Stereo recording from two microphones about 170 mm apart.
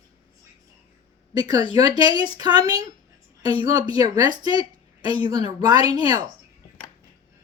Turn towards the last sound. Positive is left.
turn(degrees=-25)  # may be behind; listen again after turning